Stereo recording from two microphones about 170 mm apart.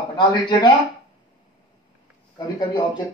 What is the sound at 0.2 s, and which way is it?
Speech, 25° left (ahead or behind).